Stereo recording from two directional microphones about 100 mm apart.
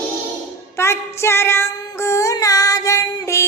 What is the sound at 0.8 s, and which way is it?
Child singing, 25° left (ahead or behind).